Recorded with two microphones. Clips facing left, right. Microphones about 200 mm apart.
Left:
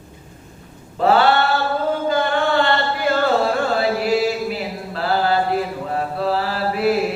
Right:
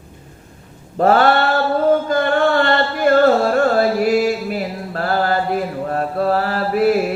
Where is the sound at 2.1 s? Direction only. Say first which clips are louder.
Right 3 dB; 50° right (ahead or behind).